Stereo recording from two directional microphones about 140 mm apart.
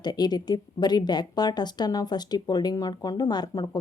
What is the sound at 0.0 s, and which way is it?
A woman's voice, 30° left (ahead or behind).